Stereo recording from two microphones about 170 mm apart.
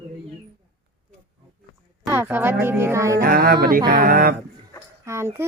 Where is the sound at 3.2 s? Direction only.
60° right (ahead or behind).